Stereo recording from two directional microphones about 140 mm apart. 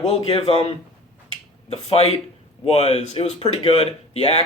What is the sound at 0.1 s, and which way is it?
Speech, 45° left (ahead or behind).